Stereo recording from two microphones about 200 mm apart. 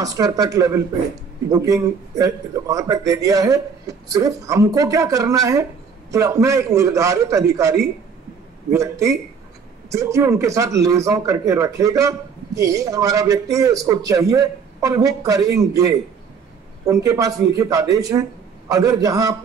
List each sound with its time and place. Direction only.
0.0 s a man's voice: 15° right (ahead or behind)